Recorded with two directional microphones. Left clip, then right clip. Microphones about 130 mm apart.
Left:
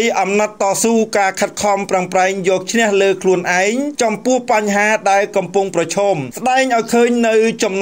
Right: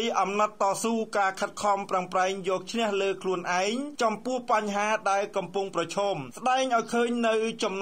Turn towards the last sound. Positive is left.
turn(degrees=20)  # may be behind; listen again after turning